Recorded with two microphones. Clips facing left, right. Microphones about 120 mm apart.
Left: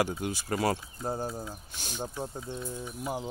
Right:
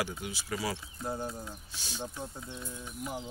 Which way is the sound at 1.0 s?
35° left (ahead or behind).